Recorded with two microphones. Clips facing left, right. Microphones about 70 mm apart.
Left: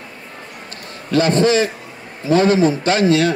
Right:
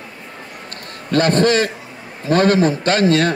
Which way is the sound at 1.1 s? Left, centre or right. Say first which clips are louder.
Even; right.